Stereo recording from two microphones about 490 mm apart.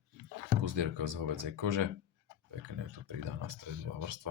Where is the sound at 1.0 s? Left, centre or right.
Right.